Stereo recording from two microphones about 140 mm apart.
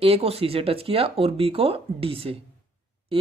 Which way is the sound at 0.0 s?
45° right (ahead or behind).